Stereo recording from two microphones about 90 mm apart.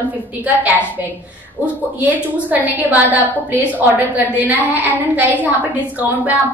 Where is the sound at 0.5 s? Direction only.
15° right (ahead or behind).